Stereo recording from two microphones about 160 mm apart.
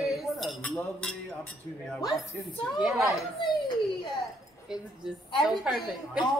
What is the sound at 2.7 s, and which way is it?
Cutlery, centre (ahead or behind).